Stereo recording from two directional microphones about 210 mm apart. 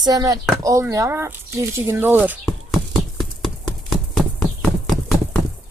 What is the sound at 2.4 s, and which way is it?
Clip-clop, 5° left (ahead or behind).